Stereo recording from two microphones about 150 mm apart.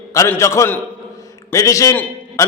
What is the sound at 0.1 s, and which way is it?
A man's voice, 20° left (ahead or behind).